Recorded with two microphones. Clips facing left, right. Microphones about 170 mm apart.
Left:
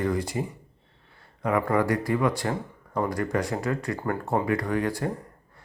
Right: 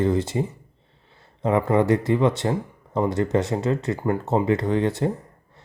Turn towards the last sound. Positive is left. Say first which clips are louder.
# right 5 dB
turn(degrees=-25)  # may be behind; listen again after turning